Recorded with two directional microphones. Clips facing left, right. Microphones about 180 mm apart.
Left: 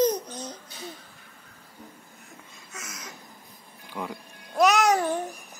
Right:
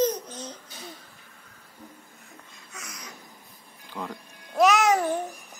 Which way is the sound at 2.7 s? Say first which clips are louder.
Left 1 dB; 5° left (ahead or behind).